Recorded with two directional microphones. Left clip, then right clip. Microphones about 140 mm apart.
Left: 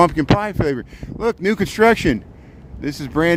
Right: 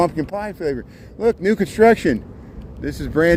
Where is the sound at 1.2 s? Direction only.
40° left (ahead or behind).